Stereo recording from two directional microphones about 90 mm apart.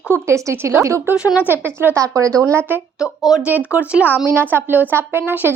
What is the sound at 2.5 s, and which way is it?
Speech, 25° right (ahead or behind).